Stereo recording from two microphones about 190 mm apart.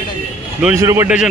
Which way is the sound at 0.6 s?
10° right (ahead or behind).